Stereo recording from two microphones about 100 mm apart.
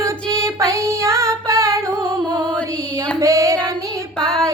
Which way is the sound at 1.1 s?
30° right (ahead or behind).